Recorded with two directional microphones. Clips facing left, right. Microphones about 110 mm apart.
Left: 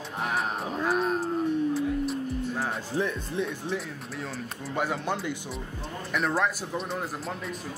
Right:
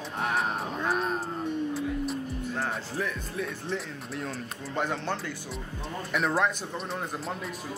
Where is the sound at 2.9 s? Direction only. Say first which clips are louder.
Left 4 dB; 25° left (ahead or behind).